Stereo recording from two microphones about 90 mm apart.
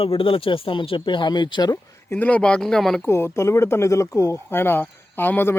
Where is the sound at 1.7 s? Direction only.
20° left (ahead or behind); by 3.0 s 5° left (ahead or behind).